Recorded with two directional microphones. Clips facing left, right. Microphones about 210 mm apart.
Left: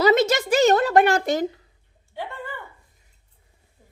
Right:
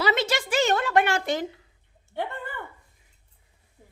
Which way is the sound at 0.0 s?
40° left (ahead or behind).